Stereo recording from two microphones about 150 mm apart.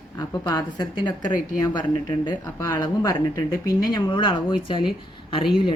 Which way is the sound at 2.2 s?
20° left (ahead or behind).